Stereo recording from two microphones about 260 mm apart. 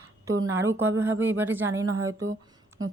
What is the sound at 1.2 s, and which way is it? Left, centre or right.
Speech, centre.